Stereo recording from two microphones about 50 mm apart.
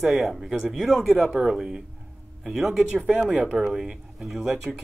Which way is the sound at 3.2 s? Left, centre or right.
Right.